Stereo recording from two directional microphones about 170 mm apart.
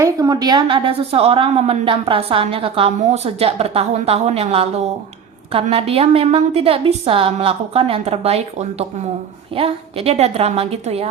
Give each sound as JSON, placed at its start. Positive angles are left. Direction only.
{"t": 0.0, "sound": "a woman's voice", "side_deg": -20}